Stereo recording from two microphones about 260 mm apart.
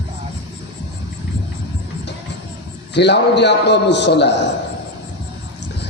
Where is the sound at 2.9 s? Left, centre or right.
Left.